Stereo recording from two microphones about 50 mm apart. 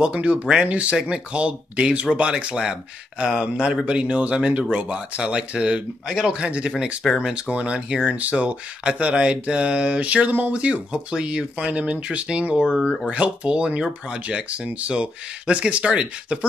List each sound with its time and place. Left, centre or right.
0.0 s speech: right
6.0 s speech: centre
6.4 s speech: right